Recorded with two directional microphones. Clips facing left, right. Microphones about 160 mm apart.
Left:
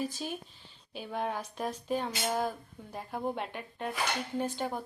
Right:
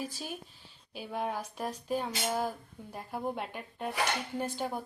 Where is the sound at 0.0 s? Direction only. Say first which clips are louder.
Left 3 dB; 10° right (ahead or behind).